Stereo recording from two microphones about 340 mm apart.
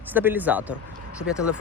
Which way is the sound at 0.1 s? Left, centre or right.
Centre.